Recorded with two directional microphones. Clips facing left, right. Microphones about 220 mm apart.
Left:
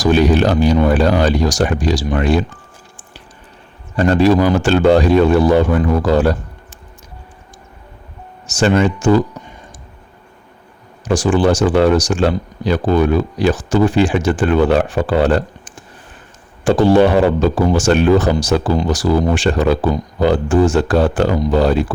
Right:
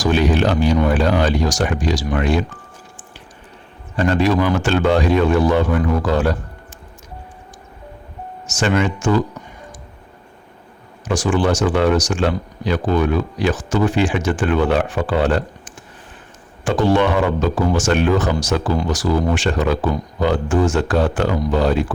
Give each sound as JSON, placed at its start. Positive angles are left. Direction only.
{"t": 0.0, "sound": "speech", "side_deg": 40}
{"t": 3.9, "sound": "speech", "side_deg": 35}
{"t": 8.4, "sound": "speech", "side_deg": 35}
{"t": 11.0, "sound": "speech", "side_deg": 35}